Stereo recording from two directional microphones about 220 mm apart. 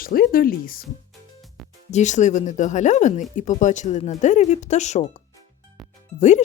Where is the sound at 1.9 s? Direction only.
35° left (ahead or behind).